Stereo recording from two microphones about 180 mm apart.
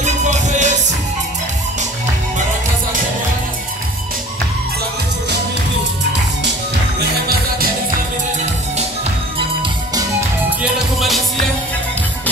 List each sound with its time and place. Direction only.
0.0 s music: 40° right (ahead or behind)
7.0 s music: 60° right (ahead or behind)
10.6 s music: centre (ahead or behind)